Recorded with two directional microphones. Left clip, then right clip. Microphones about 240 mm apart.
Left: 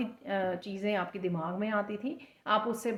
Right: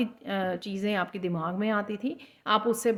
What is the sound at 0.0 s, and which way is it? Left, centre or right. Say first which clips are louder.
A woman's voice: right 2 dB; right.